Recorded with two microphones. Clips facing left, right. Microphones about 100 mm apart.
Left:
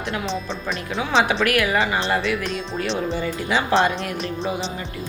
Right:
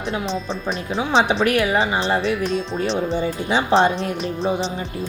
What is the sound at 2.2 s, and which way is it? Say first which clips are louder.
Speech: right 3 dB; 35° right (ahead or behind).